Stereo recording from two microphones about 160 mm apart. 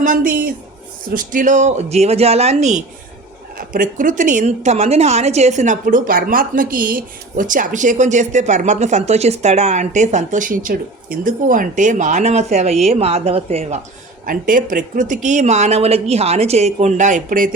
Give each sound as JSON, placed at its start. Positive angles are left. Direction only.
{"t": 0.0, "sound": "a woman's voice", "side_deg": -60}
{"t": 3.6, "sound": "a woman's voice", "side_deg": -60}
{"t": 14.3, "sound": "a woman's voice", "side_deg": -60}